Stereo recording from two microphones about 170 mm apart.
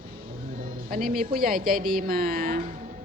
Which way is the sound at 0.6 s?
55° right (ahead or behind).